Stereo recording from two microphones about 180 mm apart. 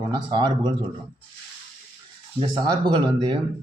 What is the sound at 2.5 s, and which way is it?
Speech, 25° right (ahead or behind).